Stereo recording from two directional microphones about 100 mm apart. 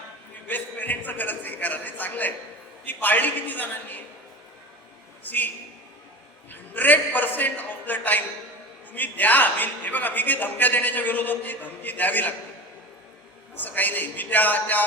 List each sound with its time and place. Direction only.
0.4 s a man's voice: 15° left (ahead or behind)
5.2 s a man's voice: 15° left (ahead or behind)
6.5 s a man's voice: 15° left (ahead or behind)
13.6 s a man's voice: 20° left (ahead or behind)